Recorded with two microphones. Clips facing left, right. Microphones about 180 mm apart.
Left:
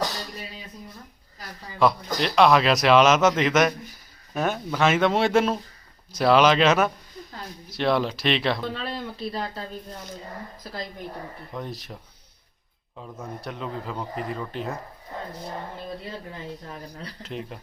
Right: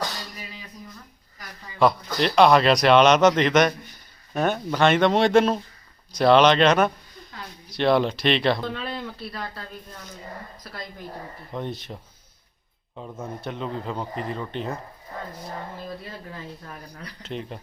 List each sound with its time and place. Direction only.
2.2 s a man's voice: centre (ahead or behind)
8.8 s speech: 30° left (ahead or behind)
11.5 s a man's voice: centre (ahead or behind)
13.0 s a man's voice: centre (ahead or behind)
16.6 s speech: 25° left (ahead or behind)
17.2 s a man's voice: centre (ahead or behind)